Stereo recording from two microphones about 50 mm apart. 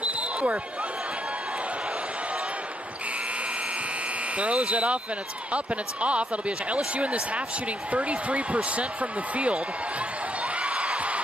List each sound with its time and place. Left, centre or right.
0.0 s basketball bounce: right
4.4 s speech: right
10.6 s a sound: right